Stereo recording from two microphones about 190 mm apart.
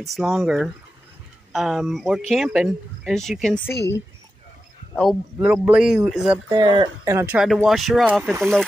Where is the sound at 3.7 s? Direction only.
60° left (ahead or behind).